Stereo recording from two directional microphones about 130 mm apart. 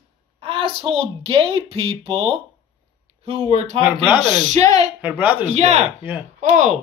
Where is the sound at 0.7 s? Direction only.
50° right (ahead or behind).